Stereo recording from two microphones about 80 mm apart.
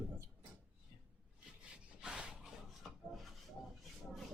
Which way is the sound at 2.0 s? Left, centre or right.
Centre.